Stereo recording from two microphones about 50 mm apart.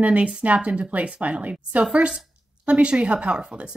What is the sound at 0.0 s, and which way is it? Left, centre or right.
A woman's voice, right.